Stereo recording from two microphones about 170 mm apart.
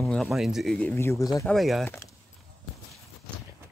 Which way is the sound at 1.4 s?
Centre (ahead or behind).